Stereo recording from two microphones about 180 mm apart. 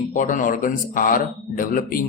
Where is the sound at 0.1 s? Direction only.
45° left (ahead or behind).